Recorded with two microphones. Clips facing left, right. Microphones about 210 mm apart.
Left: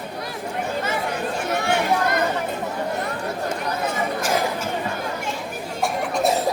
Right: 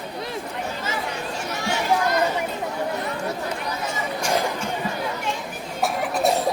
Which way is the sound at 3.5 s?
55° left (ahead or behind).